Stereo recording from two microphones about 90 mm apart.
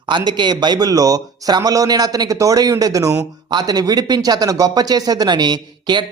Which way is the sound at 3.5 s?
50° right (ahead or behind).